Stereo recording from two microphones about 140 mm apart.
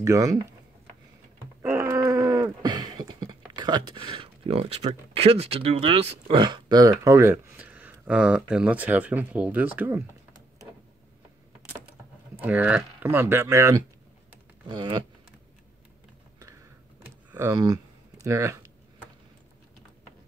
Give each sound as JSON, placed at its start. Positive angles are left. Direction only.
{"t": 0.0, "sound": "speech", "side_deg": -25}
{"t": 1.6, "sound": "a sound", "side_deg": -20}
{"t": 12.4, "sound": "speech", "side_deg": -10}
{"t": 17.4, "sound": "speech", "side_deg": -25}